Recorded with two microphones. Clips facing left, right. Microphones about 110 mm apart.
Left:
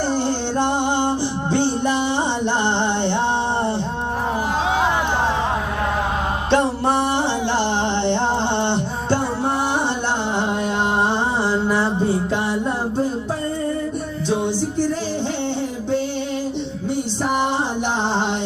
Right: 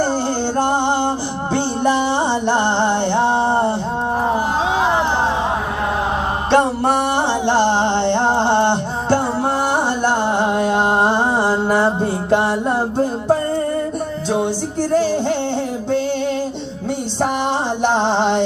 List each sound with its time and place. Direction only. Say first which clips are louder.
0.0 s music: right 2 dB; 40° right (ahead or behind)
6.5 s music: right 3 dB; 60° right (ahead or behind)